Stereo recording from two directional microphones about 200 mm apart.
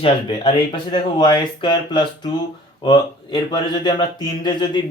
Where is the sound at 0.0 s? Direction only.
25° left (ahead or behind).